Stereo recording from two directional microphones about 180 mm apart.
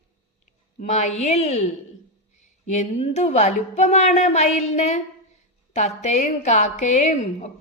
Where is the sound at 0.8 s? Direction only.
40° left (ahead or behind).